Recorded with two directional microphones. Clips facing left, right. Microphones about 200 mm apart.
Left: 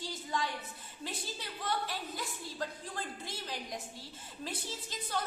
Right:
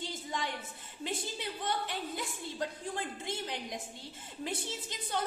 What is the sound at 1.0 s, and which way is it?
A woman's voice, 20° right (ahead or behind).